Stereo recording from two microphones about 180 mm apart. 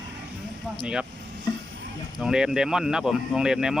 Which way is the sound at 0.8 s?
5° right (ahead or behind).